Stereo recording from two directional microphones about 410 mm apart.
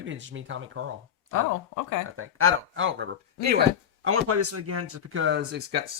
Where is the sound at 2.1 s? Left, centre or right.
Right.